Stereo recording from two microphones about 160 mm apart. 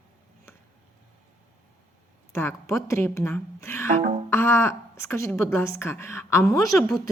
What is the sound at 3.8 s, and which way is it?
Music, 55° right (ahead or behind).